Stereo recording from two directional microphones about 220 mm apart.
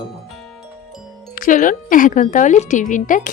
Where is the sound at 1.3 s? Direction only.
35° left (ahead or behind).